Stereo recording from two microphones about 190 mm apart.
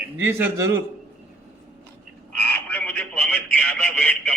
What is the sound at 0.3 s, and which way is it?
Speech, 10° right (ahead or behind).